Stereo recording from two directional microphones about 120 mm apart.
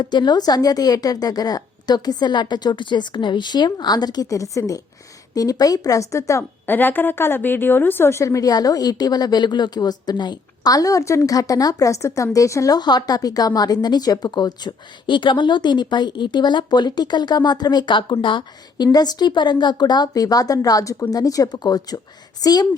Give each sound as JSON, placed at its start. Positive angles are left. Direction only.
{"t": 0.0, "sound": "a woman's voice", "side_deg": 40}